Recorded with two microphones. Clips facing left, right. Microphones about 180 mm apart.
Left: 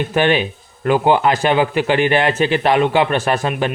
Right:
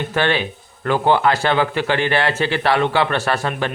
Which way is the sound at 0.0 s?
15° left (ahead or behind).